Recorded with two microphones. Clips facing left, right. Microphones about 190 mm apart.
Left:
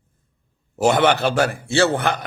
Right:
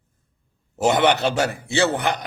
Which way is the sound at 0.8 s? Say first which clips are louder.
Left 1 dB; 20° right (ahead or behind).